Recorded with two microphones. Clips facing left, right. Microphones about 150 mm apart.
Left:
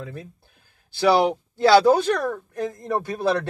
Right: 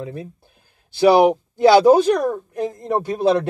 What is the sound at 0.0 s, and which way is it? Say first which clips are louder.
A man's voice: right 6 dB; 25° right (ahead or behind).